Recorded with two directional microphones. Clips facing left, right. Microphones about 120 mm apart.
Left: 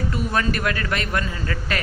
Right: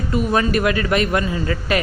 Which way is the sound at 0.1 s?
20° right (ahead or behind).